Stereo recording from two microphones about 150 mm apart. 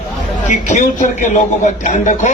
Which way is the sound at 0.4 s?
55° left (ahead or behind).